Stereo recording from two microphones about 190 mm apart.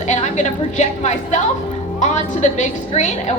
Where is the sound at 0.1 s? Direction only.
40° left (ahead or behind).